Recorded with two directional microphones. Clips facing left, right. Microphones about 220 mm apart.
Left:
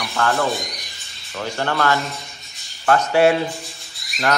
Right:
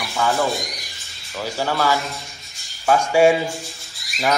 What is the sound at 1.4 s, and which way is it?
Speech, 5° right (ahead or behind).